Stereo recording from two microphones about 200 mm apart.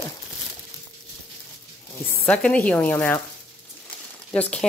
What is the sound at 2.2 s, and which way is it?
Speech, 5° left (ahead or behind).